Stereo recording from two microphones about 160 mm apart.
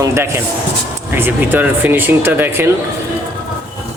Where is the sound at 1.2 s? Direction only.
15° right (ahead or behind).